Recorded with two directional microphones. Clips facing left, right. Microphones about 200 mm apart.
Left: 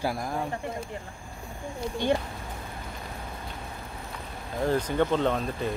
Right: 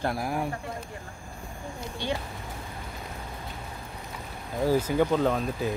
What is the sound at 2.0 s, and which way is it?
Speech, 50° left (ahead or behind).